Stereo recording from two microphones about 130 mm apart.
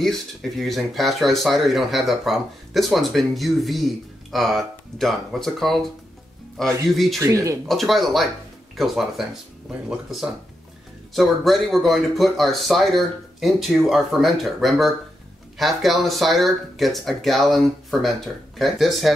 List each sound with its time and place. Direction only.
0.0 s speech: centre (ahead or behind)
7.2 s speech: 25° right (ahead or behind)
7.6 s speech: centre (ahead or behind)